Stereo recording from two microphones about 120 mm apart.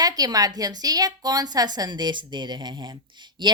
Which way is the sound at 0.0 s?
30° right (ahead or behind).